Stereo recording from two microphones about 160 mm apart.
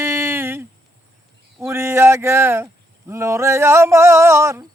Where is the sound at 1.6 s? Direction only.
15° right (ahead or behind).